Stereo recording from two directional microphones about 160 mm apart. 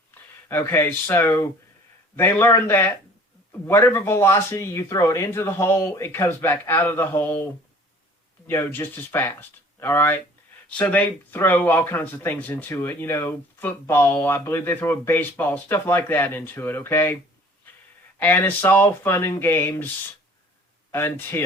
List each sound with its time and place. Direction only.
0.1 s speech: 15° left (ahead or behind)
8.4 s speech: 15° left (ahead or behind)
18.2 s speech: 10° left (ahead or behind)
20.9 s speech: 15° left (ahead or behind)